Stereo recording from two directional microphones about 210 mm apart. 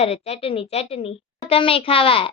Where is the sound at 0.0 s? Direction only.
30° left (ahead or behind).